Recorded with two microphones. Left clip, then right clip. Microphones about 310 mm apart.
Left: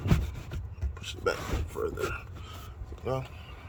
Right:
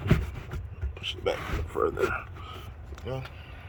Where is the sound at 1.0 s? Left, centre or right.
Centre.